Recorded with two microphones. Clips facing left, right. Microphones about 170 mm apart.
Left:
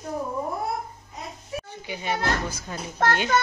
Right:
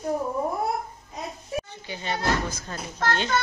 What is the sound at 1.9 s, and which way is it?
Speech, 10° left (ahead or behind).